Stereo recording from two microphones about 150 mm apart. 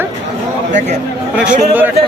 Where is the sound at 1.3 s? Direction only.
10° right (ahead or behind).